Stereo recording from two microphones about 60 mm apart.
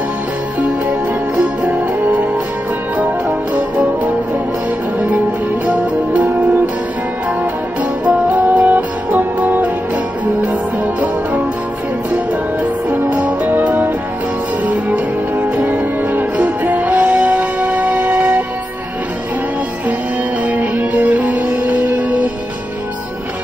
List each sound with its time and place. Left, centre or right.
0.6 s music: right
8.0 s music: right
12.9 s music: right
15.5 s music: right
20.4 s music: right